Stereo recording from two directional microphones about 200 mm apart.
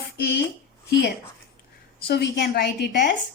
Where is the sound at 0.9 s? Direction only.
55° left (ahead or behind).